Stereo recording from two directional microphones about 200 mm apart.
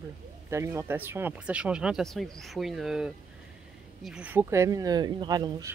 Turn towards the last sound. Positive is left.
turn(degrees=-20)  # may be behind; listen again after turning